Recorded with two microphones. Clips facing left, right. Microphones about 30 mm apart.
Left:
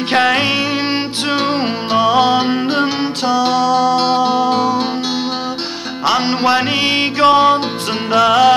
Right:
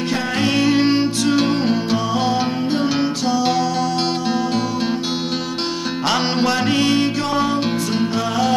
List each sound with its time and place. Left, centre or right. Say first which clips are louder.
0.1 s music: left 13 dB; left
0.4 s music: even; left
2.0 s music: left 7 dB; left
6.4 s music: left 2 dB; left
8.1 s music: left 14 dB; left